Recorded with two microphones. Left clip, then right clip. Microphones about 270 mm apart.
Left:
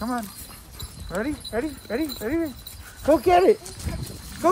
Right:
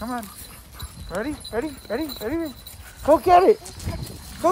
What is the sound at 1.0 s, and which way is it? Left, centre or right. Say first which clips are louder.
Dog: even; centre.